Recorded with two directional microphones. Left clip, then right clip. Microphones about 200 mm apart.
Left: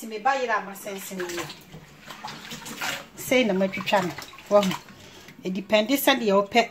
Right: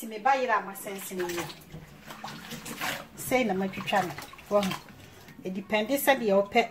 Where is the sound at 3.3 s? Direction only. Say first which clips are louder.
Left 5 dB; 35° left (ahead or behind).